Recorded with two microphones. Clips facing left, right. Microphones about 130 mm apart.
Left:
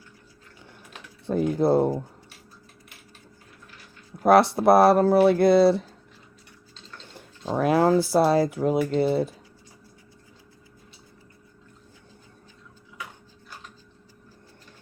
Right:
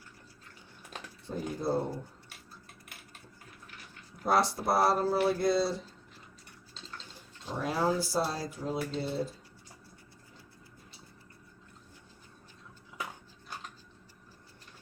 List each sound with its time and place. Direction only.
1.3 s speech: 75° left (ahead or behind)
4.2 s speech: 65° left (ahead or behind)
7.1 s speech: 60° left (ahead or behind)